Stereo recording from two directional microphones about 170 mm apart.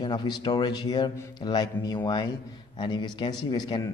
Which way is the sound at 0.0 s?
25° left (ahead or behind).